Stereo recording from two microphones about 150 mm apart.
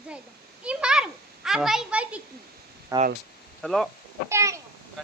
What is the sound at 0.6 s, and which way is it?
Children playing, 5° right (ahead or behind).